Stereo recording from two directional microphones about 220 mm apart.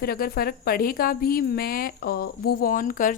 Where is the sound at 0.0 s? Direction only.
45° left (ahead or behind).